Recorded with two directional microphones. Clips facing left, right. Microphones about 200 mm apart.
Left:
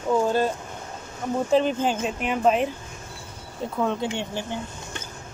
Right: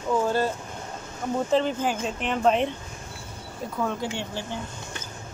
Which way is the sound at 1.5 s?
20° left (ahead or behind).